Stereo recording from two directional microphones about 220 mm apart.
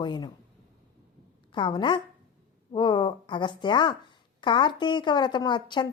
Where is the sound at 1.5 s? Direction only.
20° left (ahead or behind).